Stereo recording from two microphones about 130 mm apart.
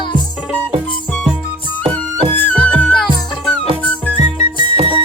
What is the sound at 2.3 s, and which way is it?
Music, 10° left (ahead or behind).